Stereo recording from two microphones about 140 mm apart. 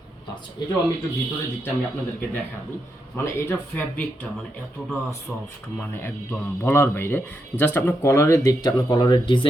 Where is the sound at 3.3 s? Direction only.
15° left (ahead or behind).